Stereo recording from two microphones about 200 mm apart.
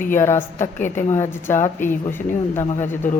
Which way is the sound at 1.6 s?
40° left (ahead or behind).